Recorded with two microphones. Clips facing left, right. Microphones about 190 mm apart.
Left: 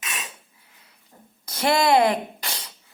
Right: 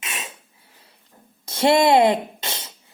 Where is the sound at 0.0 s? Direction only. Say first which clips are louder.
Right 1 dB; 25° right (ahead or behind).